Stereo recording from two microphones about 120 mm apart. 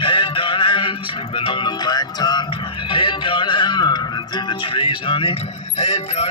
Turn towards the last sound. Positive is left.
turn(degrees=60)  # may be behind; listen again after turning